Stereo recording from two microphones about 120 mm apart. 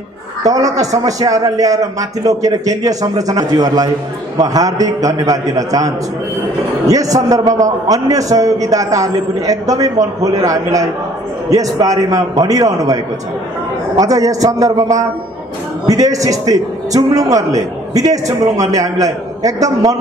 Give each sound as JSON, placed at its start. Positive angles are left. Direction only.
{"t": 0.5, "sound": "a man's voice", "side_deg": -30}